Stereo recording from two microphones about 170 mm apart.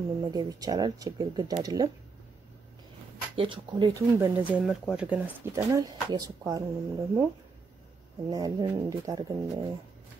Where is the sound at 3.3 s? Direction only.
30° right (ahead or behind).